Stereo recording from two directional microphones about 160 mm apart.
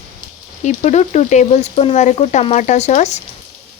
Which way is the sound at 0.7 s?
45° left (ahead or behind).